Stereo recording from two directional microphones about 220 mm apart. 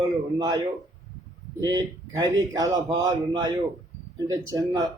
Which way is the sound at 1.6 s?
20° right (ahead or behind).